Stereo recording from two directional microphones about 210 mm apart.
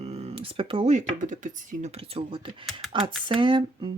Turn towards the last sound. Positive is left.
turn(degrees=-25)  # may be behind; listen again after turning